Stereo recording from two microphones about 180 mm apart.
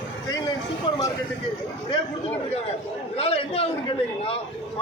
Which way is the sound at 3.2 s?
30° left (ahead or behind).